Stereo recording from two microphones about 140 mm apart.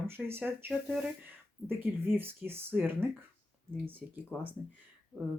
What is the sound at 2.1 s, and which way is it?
Speech, 15° right (ahead or behind).